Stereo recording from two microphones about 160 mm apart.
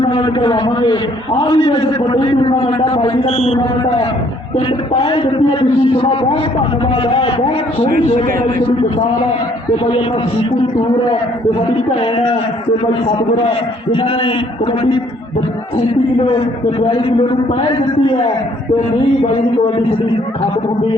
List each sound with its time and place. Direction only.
0.0 s a man's voice: 30° left (ahead or behind)
5.0 s a man's voice: 30° left (ahead or behind)
12.8 s a man's voice: 30° left (ahead or behind)
16.8 s a man's voice: 30° left (ahead or behind)